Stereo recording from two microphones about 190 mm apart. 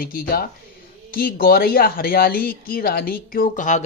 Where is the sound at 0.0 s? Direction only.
50° left (ahead or behind).